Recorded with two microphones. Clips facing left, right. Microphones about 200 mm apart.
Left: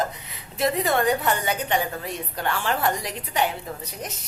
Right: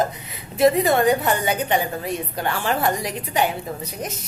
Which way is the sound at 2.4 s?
5° right (ahead or behind).